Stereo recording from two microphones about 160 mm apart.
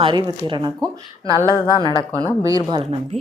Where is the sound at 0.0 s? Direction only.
30° right (ahead or behind).